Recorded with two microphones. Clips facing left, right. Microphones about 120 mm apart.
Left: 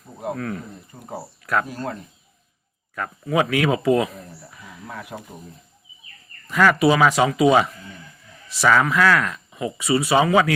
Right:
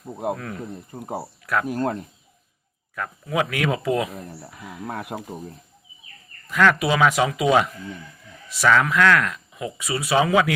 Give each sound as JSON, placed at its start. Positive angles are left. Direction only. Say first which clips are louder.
{"t": 0.2, "sound": "speech", "louder": "even", "side_deg": -5}
{"t": 0.9, "sound": "speech", "louder": "right 3 dB", "side_deg": -45}
{"t": 2.9, "sound": "speech", "louder": "left 3 dB", "side_deg": 0}
{"t": 4.3, "sound": "speech", "louder": "right 4 dB", "side_deg": -60}
{"t": 6.5, "sound": "speech", "louder": "left 2 dB", "side_deg": 5}